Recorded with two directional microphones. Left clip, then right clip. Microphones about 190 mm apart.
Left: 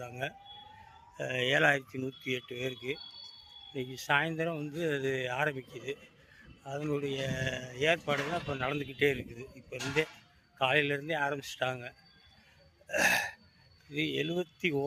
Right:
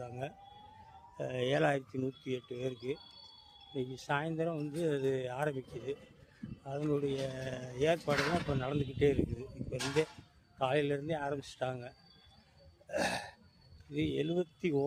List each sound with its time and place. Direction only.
0.0 s a sound: centre (ahead or behind)
1.1 s a man's voice: 5° right (ahead or behind)
8.2 s a man's voice: centre (ahead or behind)
9.7 s speech: 40° left (ahead or behind)
10.6 s a man's voice: centre (ahead or behind)
12.9 s gasp: centre (ahead or behind)
13.9 s a man's voice: centre (ahead or behind)